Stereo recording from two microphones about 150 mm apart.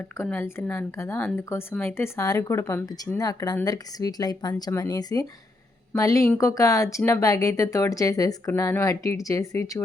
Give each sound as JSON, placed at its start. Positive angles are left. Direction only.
{"t": 0.2, "sound": "speech", "side_deg": 15}